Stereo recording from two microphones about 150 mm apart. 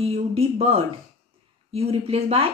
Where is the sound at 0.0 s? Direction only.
40° right (ahead or behind).